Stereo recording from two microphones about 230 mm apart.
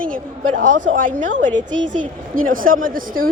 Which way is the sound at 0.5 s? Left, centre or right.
Right.